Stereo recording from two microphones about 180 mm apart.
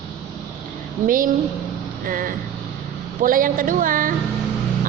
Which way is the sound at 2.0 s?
50° right (ahead or behind).